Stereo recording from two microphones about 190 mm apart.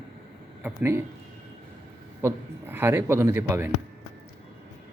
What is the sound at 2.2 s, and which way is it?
A man's voice, 10° right (ahead or behind).